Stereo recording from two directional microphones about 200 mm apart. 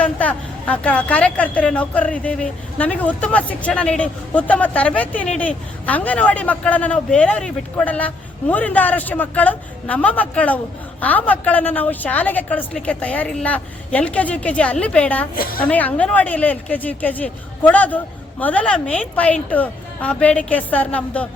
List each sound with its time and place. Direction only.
0.0 s speech: 5° left (ahead or behind)
15.4 s a woman's voice: 45° left (ahead or behind)
15.6 s speech: 10° left (ahead or behind)